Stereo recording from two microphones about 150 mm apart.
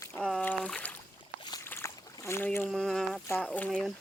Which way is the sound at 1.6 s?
15° left (ahead or behind).